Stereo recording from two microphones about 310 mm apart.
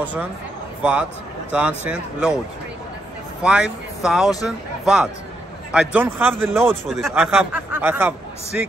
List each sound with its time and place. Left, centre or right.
0.0 s speech: centre
1.5 s speech: centre
3.4 s a man's voice: centre